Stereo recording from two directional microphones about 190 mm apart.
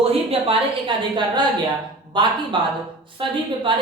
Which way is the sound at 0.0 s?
30° right (ahead or behind).